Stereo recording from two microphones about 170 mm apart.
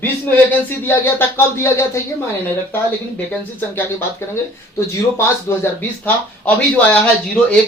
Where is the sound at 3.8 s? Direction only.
15° left (ahead or behind).